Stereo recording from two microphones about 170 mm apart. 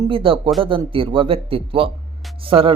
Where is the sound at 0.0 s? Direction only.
30° right (ahead or behind).